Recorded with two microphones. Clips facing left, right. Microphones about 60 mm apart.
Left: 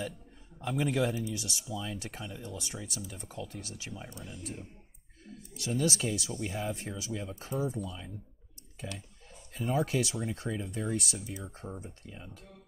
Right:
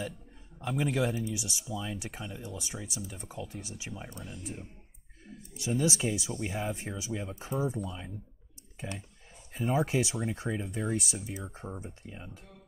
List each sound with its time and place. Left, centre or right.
0.6 s speech: centre
9.5 s speech: centre